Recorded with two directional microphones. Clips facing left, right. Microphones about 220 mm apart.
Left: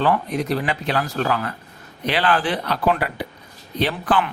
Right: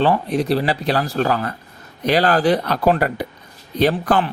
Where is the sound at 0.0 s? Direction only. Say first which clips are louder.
Right 3 dB; 30° right (ahead or behind).